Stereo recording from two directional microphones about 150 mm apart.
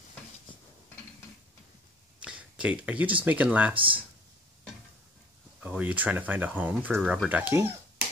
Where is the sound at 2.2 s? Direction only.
5° right (ahead or behind).